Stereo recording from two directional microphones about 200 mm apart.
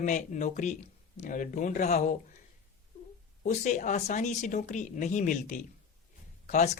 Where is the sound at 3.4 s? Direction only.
40° left (ahead or behind).